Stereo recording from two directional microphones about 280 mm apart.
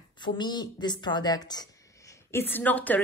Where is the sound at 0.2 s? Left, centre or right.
Centre.